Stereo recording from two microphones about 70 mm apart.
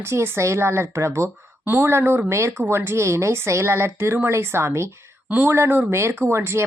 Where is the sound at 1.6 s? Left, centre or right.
Right.